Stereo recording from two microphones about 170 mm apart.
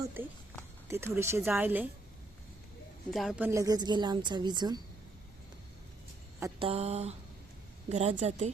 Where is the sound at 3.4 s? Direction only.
20° right (ahead or behind).